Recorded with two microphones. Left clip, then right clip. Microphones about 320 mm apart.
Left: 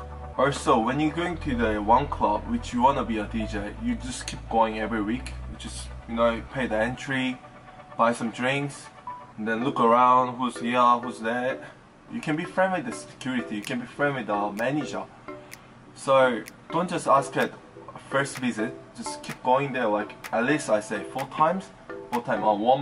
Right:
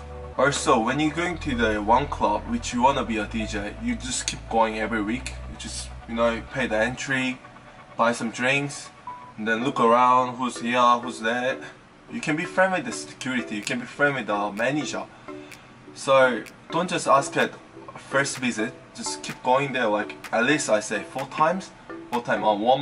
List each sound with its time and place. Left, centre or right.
0.4 s speech: centre
16.1 s speech: centre
22.5 s speech: left